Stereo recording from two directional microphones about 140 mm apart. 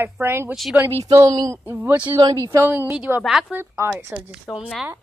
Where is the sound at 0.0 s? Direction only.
20° right (ahead or behind).